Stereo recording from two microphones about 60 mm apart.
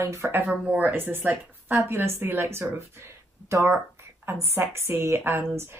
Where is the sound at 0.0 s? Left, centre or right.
Right.